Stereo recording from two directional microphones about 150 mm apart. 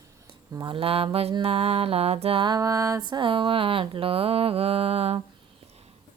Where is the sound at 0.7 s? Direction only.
40° right (ahead or behind).